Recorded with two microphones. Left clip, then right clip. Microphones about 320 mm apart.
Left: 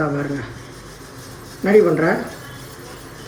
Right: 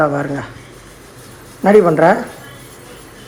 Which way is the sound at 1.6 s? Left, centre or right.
Centre.